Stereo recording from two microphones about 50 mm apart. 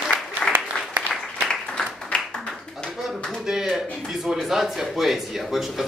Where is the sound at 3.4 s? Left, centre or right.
Centre.